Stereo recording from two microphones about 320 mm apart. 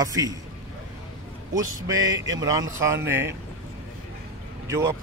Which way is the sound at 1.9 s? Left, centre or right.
Right.